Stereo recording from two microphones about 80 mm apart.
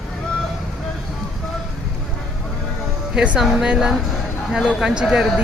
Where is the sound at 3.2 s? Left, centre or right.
Centre.